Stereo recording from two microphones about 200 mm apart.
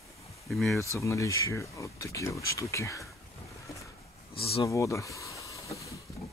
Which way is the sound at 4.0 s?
30° left (ahead or behind).